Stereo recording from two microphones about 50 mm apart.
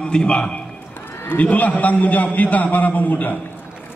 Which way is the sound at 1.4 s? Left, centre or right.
Left.